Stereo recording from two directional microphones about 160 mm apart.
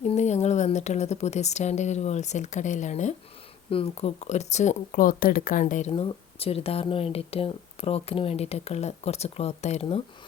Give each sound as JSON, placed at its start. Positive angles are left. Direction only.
{"t": 0.0, "sound": "speech", "side_deg": 45}
{"t": 5.9, "sound": "speech", "side_deg": 35}